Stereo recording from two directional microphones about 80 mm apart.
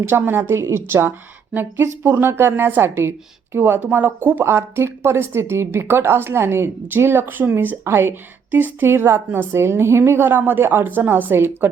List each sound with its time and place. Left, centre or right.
0.0 s speech: right